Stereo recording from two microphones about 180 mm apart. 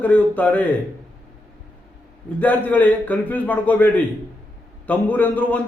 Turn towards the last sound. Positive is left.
turn(degrees=10)  # may be behind; listen again after turning